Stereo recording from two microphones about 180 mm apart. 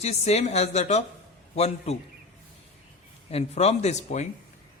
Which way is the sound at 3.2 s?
35° left (ahead or behind).